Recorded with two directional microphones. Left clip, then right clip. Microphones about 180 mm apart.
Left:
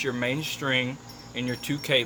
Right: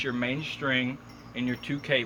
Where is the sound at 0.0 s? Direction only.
50° left (ahead or behind).